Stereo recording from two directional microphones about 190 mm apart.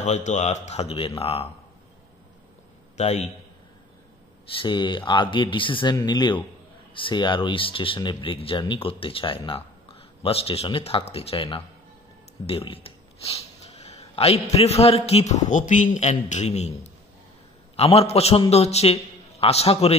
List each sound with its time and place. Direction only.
0.0 s a man's voice: 40° left (ahead or behind)
3.0 s a man's voice: 35° left (ahead or behind)
4.6 s a man's voice: 25° left (ahead or behind)